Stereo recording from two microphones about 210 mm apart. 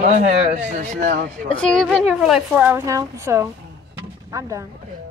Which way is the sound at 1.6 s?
Centre (ahead or behind).